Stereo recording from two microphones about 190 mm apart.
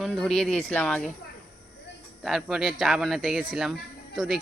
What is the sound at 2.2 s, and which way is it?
Speech, centre (ahead or behind).